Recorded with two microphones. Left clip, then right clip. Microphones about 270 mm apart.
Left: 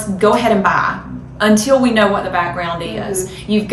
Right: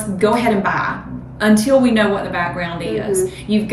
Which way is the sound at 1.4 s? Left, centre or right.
Centre.